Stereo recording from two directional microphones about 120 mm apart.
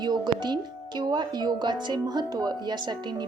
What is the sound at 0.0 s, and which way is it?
A woman's voice, 35° right (ahead or behind).